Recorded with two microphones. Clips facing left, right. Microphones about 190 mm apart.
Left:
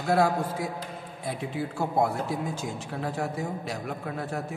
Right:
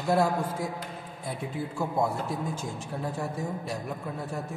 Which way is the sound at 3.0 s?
80° left.